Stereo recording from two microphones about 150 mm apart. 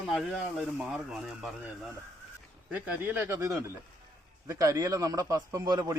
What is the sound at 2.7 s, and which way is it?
A man's voice, 15° right (ahead or behind).